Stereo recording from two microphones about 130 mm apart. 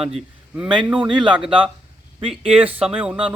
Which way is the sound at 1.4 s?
45° right (ahead or behind).